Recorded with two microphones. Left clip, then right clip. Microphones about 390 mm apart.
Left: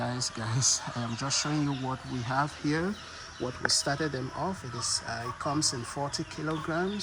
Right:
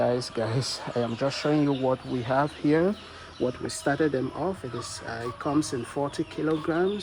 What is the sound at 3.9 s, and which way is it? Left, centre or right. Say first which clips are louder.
Speech: right 6 dB; right.